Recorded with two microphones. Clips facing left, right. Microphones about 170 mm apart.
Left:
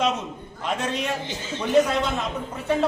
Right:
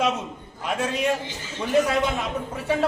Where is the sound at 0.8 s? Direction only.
5° right (ahead or behind).